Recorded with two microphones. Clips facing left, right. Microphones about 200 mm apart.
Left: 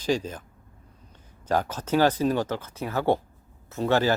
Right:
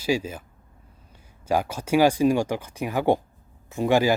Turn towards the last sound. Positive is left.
turn(degrees=-10)  # may be behind; listen again after turning